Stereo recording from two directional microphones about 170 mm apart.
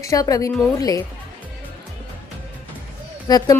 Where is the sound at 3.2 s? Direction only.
20° left (ahead or behind).